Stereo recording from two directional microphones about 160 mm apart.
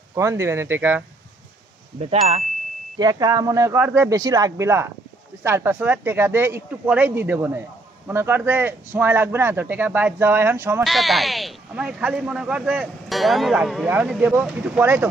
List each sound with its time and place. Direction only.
0.1 s a man's voice: 20° right (ahead or behind)
2.0 s speech: 40° right (ahead or behind)
3.0 s a man's voice: 25° right (ahead or behind)
10.8 s a man's voice: centre (ahead or behind)